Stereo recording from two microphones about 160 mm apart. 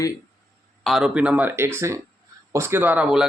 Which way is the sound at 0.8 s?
Centre (ahead or behind).